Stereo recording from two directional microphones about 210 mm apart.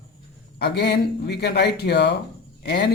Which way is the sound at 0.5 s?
50° left (ahead or behind).